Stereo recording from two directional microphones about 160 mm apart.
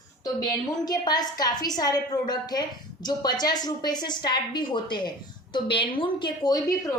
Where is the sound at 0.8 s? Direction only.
25° left (ahead or behind).